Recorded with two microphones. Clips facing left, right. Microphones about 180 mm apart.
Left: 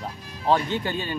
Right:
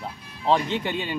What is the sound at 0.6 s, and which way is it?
Speech, 25° right (ahead or behind).